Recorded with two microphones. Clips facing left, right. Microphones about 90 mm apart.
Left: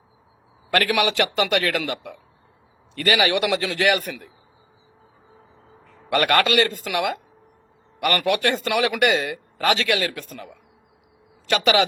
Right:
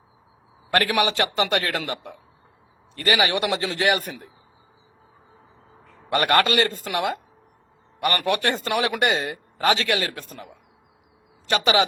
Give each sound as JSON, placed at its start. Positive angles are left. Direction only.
{"t": 0.9, "sound": "a man's voice", "side_deg": -35}
{"t": 6.1, "sound": "a man's voice", "side_deg": -25}
{"t": 11.4, "sound": "a man's voice", "side_deg": -30}